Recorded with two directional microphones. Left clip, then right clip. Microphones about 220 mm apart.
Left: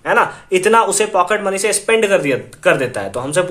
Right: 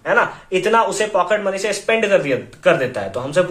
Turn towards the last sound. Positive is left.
turn(degrees=35)  # may be behind; listen again after turning